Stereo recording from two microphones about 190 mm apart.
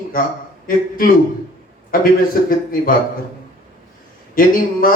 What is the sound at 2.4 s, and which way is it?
Speech, 50° left (ahead or behind).